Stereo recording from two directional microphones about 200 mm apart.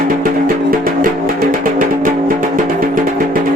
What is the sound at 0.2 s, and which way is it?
Music, 45° right (ahead or behind).